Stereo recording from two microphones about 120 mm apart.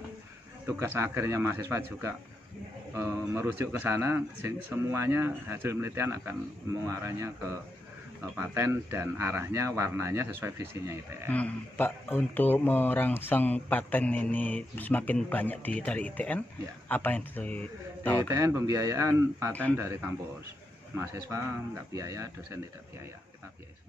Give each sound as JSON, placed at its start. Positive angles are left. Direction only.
{"t": 0.7, "sound": "a man's voice", "side_deg": -25}
{"t": 11.2, "sound": "speech", "side_deg": 10}
{"t": 18.3, "sound": "a man's voice", "side_deg": -25}
{"t": 20.9, "sound": "a man's voice", "side_deg": -25}